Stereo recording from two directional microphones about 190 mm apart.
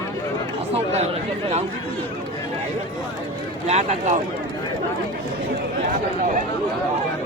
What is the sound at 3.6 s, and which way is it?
Speech, 35° right (ahead or behind).